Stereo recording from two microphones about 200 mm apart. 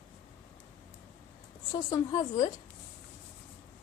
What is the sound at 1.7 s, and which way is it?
Speech, 20° left (ahead or behind).